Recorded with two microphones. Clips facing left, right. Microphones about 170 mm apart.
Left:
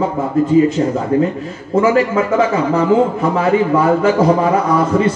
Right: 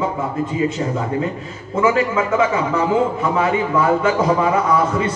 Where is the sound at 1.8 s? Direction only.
35° left (ahead or behind).